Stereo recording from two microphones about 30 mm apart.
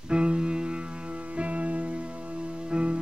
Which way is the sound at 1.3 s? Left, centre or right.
Right.